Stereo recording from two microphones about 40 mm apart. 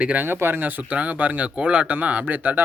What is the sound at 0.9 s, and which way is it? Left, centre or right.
Speech, right.